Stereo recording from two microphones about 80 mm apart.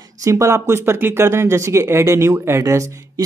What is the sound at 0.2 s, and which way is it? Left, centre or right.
Speech, right.